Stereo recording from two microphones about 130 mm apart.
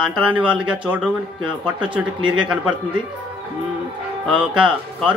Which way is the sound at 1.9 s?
40° right (ahead or behind).